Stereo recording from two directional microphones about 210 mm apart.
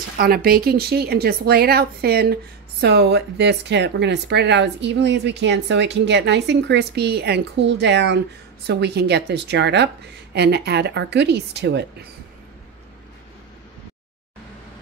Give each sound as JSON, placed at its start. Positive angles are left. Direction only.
{"t": 0.2, "sound": "a woman's voice", "side_deg": -45}